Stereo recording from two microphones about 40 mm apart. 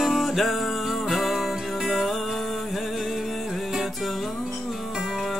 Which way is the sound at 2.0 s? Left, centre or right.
Centre.